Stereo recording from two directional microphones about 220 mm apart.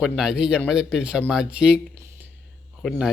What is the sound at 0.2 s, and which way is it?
Speech, 5° right (ahead or behind).